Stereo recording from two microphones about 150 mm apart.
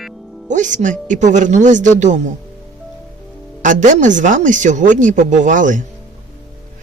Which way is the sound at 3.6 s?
55° right (ahead or behind).